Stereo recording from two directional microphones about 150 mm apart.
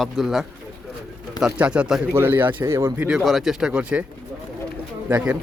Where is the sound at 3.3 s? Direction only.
Centre (ahead or behind).